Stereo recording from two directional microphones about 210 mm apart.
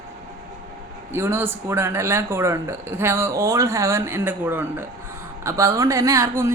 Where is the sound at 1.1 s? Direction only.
10° right (ahead or behind).